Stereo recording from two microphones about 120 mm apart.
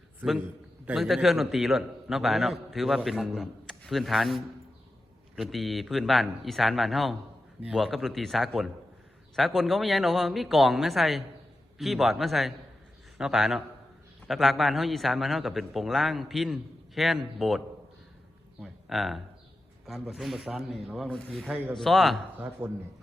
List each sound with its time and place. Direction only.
0.2 s a man's voice: 5° right (ahead or behind)
5.4 s a man's voice: centre (ahead or behind)
18.6 s a man's voice: centre (ahead or behind)
22.6 s speech: 15° right (ahead or behind)